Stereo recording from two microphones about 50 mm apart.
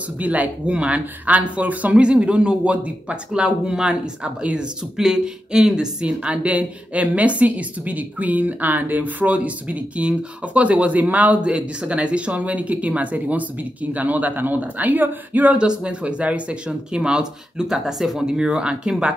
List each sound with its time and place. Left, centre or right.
0.2 s a woman's voice: right
15.5 s speech: right